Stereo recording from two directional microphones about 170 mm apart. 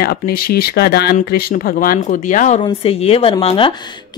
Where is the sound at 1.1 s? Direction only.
55° left (ahead or behind).